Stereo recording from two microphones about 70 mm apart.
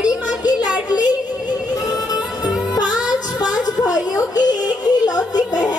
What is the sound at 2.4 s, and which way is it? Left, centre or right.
Music, left.